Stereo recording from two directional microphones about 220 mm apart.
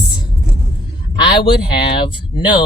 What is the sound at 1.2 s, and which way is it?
Speech, 25° left (ahead or behind).